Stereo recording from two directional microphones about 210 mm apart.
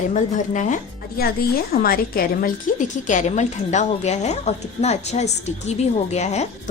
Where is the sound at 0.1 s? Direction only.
35° left (ahead or behind).